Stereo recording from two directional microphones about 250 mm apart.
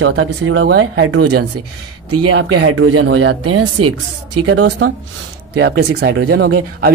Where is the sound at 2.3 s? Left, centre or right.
Right.